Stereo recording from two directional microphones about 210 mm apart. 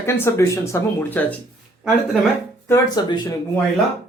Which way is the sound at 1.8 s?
5° right (ahead or behind).